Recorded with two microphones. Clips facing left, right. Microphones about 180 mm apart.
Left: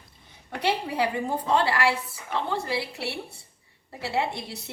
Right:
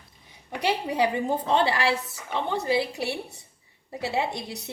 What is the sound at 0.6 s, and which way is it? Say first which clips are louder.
A woman's voice: right 1 dB; 20° right (ahead or behind).